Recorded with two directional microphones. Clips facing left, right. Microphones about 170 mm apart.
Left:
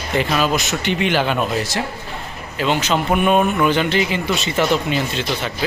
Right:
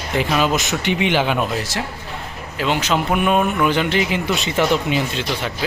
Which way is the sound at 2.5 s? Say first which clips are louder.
Left 1 dB; 10° right (ahead or behind).